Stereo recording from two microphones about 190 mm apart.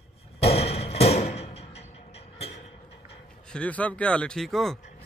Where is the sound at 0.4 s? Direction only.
30° left (ahead or behind).